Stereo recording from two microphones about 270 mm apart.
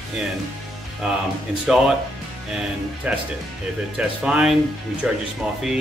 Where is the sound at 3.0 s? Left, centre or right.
Centre.